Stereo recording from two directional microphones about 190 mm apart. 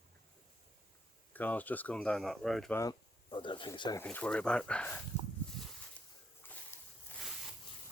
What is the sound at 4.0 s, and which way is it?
Speech, 10° left (ahead or behind).